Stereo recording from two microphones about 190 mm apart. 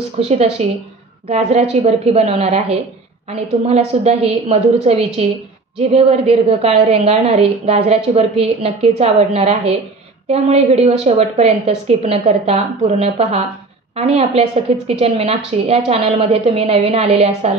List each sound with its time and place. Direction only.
0.2 s a woman's voice: 35° right (ahead or behind)